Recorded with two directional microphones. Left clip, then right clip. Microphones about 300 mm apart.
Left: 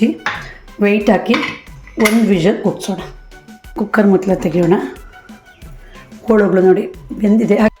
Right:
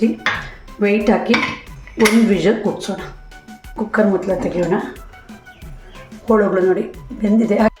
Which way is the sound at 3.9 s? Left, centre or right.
Left.